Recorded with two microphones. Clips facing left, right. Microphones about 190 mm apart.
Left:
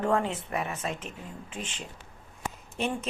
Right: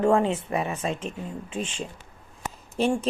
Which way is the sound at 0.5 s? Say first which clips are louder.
Right 5 dB; 30° right (ahead or behind).